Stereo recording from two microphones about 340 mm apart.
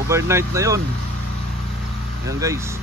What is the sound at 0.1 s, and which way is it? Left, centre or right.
Speech, centre.